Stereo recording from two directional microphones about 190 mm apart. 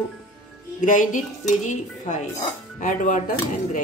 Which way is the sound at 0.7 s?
40° left (ahead or behind).